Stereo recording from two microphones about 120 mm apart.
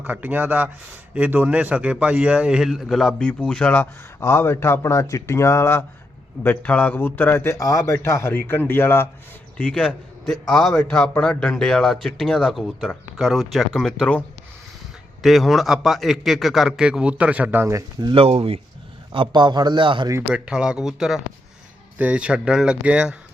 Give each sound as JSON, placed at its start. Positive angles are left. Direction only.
{"t": 0.0, "sound": "a man's voice", "side_deg": -15}
{"t": 18.0, "sound": "a man's voice", "side_deg": -50}
{"t": 20.3, "sound": "speech", "side_deg": -10}